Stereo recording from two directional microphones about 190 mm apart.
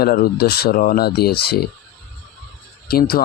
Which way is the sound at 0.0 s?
50° left (ahead or behind).